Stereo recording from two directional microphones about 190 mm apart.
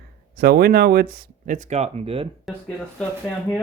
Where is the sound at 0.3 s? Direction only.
55° right (ahead or behind); by 2.2 s 30° right (ahead or behind).